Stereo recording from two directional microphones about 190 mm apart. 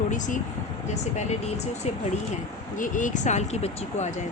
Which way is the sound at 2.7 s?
40° left (ahead or behind).